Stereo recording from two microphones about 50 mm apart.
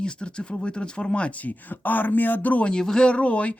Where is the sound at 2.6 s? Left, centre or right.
Centre.